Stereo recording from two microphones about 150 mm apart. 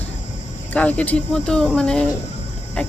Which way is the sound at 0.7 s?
10° left (ahead or behind).